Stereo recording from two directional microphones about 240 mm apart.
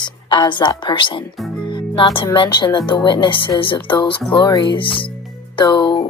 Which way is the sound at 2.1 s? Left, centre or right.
Left.